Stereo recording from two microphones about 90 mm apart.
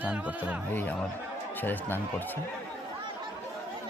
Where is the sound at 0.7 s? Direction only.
20° left (ahead or behind).